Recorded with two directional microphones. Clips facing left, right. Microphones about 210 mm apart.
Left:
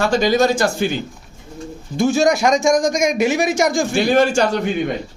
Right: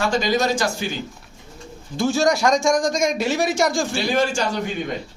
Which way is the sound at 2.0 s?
20° left (ahead or behind).